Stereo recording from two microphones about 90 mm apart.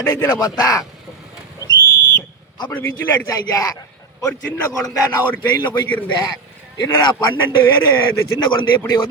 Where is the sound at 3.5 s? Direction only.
40° left (ahead or behind).